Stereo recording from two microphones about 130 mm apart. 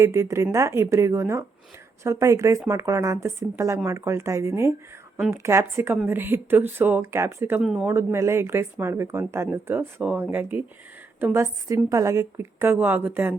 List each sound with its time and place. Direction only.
0.0 s a woman's voice: 20° right (ahead or behind)
7.6 s speech: 5° right (ahead or behind)
7.9 s a woman's voice: 20° right (ahead or behind)